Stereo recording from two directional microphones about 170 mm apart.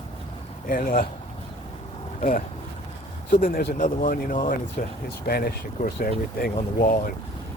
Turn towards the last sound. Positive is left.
turn(degrees=60)  # may be behind; listen again after turning